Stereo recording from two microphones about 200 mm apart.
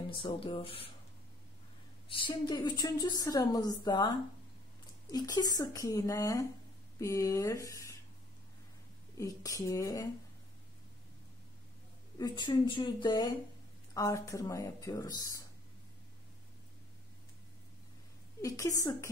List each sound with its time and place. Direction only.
0.1 s a woman's voice: 25° left (ahead or behind)
2.0 s a woman's voice: 25° left (ahead or behind)
5.1 s speech: 20° left (ahead or behind)
9.1 s speech: 15° left (ahead or behind)
12.2 s a woman's voice: 20° left (ahead or behind)
18.4 s speech: 15° left (ahead or behind)